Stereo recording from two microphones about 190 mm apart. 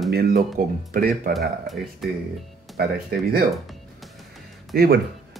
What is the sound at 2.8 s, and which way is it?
Speech, 55° right (ahead or behind).